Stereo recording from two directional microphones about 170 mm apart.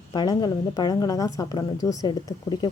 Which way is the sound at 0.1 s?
25° left (ahead or behind).